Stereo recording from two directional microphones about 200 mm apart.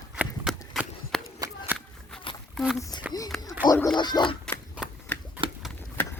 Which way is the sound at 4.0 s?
20° left (ahead or behind).